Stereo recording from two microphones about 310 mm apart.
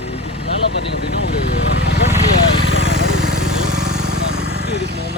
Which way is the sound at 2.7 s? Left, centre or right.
Right.